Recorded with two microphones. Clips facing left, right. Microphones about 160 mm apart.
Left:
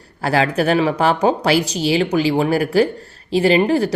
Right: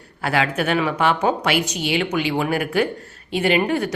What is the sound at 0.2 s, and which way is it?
Speech, 35° left (ahead or behind).